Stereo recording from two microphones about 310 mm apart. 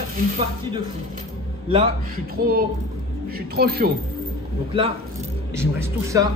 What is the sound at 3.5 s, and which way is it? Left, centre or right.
Speech, right.